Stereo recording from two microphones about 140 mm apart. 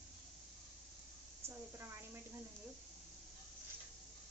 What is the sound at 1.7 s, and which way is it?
Speech, 15° right (ahead or behind).